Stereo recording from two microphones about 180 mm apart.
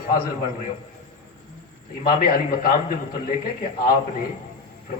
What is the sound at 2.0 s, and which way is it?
Speech, 55° left (ahead or behind).